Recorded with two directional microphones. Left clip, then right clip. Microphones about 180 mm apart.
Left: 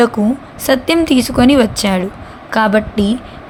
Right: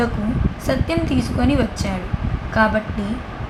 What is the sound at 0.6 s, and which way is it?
A woman's voice, 45° left (ahead or behind).